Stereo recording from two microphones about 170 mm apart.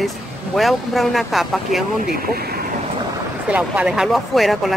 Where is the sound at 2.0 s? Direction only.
60° right (ahead or behind).